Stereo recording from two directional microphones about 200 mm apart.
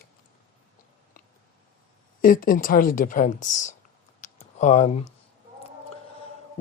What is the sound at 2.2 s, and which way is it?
Speech, 45° left (ahead or behind).